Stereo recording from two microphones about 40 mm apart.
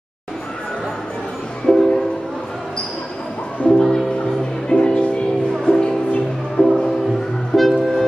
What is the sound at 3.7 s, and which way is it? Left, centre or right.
Music, centre.